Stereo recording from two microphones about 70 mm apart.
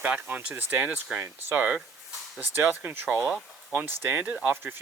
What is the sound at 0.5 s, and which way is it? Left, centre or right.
Speech, right.